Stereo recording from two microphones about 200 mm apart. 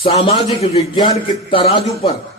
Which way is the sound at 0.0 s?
30° left (ahead or behind).